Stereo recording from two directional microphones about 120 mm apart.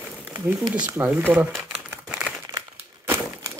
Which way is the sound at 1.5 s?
5° right (ahead or behind).